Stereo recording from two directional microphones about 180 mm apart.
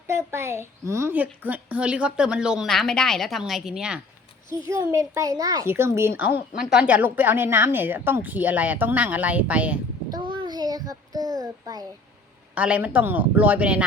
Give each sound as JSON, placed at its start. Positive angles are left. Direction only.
{"t": 0.1, "sound": "a woman's voice", "side_deg": -15}
{"t": 4.6, "sound": "a child's voice", "side_deg": -20}
{"t": 10.1, "sound": "child singing", "side_deg": -25}
{"t": 12.5, "sound": "a child's voice", "side_deg": -5}